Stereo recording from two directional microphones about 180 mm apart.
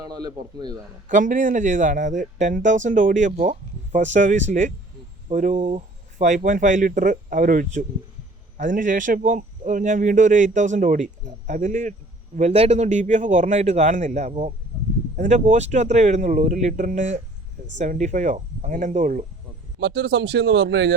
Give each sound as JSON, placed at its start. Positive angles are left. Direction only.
{"t": 0.0, "sound": "a man's voice", "side_deg": -20}
{"t": 1.0, "sound": "a man's voice", "side_deg": -45}
{"t": 19.8, "sound": "speech", "side_deg": -65}